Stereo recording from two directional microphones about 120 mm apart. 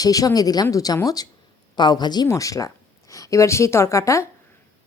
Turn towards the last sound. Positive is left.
turn(degrees=25)  # may be behind; listen again after turning